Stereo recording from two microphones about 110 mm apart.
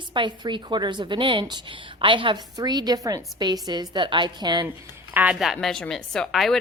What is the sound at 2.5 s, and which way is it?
A woman's voice, 35° right (ahead or behind).